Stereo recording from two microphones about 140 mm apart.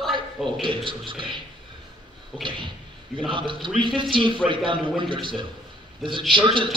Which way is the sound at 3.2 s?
35° right (ahead or behind).